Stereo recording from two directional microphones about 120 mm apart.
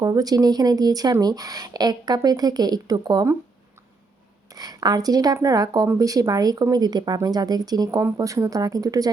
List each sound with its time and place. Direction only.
0.0 s speech: 30° right (ahead or behind)
4.5 s speech: 35° right (ahead or behind)